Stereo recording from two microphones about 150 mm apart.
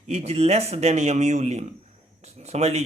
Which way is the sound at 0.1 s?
45° right (ahead or behind).